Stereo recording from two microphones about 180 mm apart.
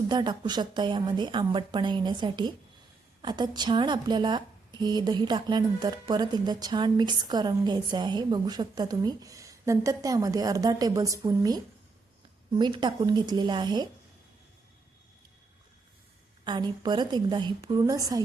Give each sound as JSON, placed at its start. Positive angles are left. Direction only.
{"t": 0.1, "sound": "a woman's voice", "side_deg": -25}
{"t": 16.4, "sound": "a woman's voice", "side_deg": -25}